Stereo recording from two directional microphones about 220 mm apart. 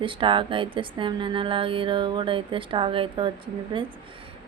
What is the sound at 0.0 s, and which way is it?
Speech, 25° right (ahead or behind).